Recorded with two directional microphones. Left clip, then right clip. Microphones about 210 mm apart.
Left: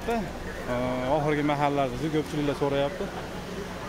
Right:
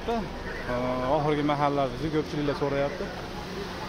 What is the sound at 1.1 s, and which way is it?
Speech, 5° left (ahead or behind).